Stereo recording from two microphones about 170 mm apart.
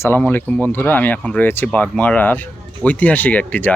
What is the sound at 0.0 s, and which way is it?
Speech, 10° left (ahead or behind).